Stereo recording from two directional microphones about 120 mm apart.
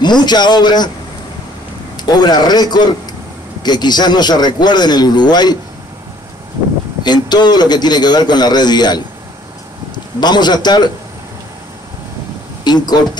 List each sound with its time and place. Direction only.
0.0 s a man's voice: 35° left (ahead or behind)
2.0 s a man's voice: 35° left (ahead or behind)
7.0 s a man's voice: 35° left (ahead or behind)
10.2 s a man's voice: 35° left (ahead or behind)
12.6 s a man's voice: 35° left (ahead or behind)